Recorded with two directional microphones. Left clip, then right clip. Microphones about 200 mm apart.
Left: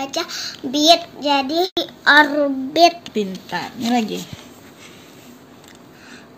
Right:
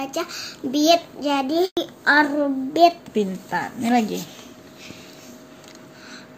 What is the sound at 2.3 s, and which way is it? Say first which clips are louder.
Child singing: left 3 dB; 30° left (ahead or behind).